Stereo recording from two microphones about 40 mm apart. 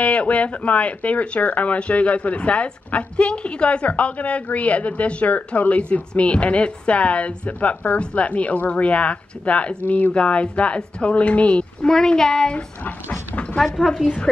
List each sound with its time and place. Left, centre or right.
0.0 s speech: left
11.8 s a child's voice: centre
14.0 s a woman's voice: left